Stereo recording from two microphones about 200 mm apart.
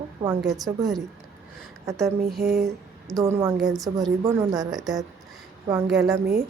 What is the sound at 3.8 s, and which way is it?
Speech, centre (ahead or behind).